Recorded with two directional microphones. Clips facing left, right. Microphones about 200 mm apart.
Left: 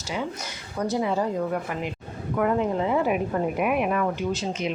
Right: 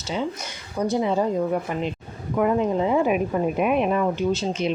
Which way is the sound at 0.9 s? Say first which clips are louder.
Right 2 dB; 20° right (ahead or behind).